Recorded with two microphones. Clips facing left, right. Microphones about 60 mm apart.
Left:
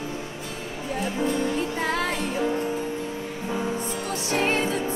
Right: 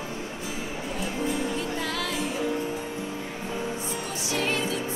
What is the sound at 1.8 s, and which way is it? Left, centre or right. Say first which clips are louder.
Music: left 5 dB; left.